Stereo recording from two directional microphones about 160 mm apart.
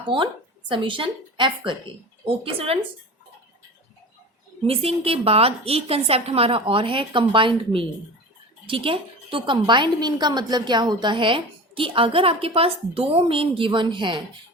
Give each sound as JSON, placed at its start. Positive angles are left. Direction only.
{"t": 0.1, "sound": "a woman's voice", "side_deg": -30}
{"t": 4.6, "sound": "a woman's voice", "side_deg": -35}